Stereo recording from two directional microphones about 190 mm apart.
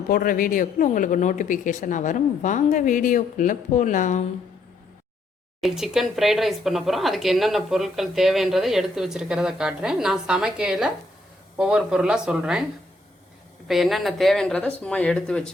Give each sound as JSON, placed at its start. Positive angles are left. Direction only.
{"t": 0.1, "sound": "speech", "side_deg": 50}
{"t": 5.5, "sound": "speech", "side_deg": 0}
{"t": 13.7, "sound": "speech", "side_deg": 0}